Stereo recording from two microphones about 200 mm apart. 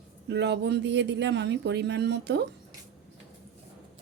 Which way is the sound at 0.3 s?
60° right (ahead or behind).